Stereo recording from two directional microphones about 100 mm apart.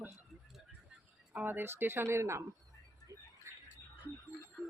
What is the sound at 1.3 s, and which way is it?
A woman's voice, 20° right (ahead or behind).